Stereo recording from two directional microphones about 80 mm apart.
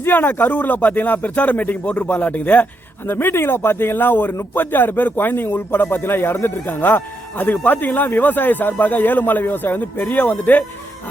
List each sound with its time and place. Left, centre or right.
0.0 s speech: left